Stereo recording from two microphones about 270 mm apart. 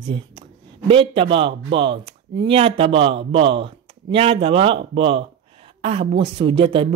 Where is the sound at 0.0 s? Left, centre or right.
Centre.